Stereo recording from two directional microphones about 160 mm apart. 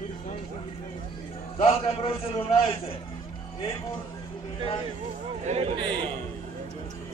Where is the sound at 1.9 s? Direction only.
35° left (ahead or behind).